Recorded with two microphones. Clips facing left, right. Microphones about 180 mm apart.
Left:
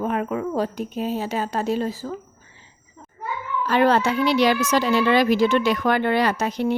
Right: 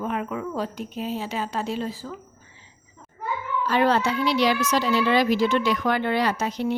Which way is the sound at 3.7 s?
60° left (ahead or behind).